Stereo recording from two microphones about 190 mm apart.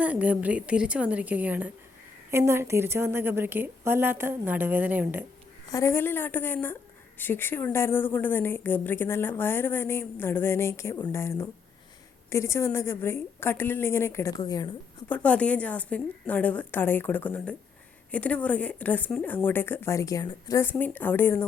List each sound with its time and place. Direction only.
0.0 s a woman's voice: 5° right (ahead or behind)
5.7 s a woman's voice: 15° left (ahead or behind)
15.1 s a woman's voice: 5° left (ahead or behind)